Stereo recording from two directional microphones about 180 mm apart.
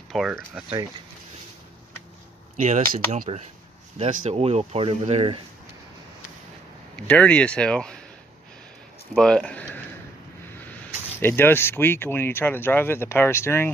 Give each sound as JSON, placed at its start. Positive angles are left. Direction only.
{"t": 0.1, "sound": "speech", "side_deg": -5}
{"t": 2.5, "sound": "speech", "side_deg": -45}
{"t": 7.0, "sound": "speech", "side_deg": 5}
{"t": 9.1, "sound": "speech", "side_deg": 5}
{"t": 11.1, "sound": "speech", "side_deg": 10}